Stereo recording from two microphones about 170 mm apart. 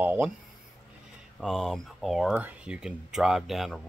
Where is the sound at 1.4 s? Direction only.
Centre (ahead or behind).